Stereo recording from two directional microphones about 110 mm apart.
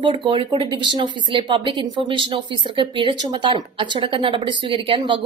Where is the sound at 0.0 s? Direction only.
45° right (ahead or behind).